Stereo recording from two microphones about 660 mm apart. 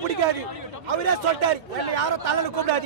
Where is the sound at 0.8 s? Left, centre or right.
Right.